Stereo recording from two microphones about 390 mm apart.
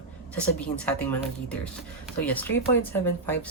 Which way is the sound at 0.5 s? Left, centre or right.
Centre.